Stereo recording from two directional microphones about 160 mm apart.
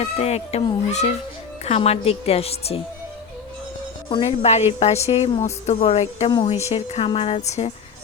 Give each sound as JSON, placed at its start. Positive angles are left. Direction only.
{"t": 0.0, "sound": "a woman's voice", "side_deg": 40}
{"t": 4.1, "sound": "a woman's voice", "side_deg": 35}